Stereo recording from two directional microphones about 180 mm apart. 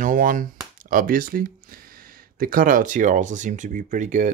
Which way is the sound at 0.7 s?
50° right (ahead or behind).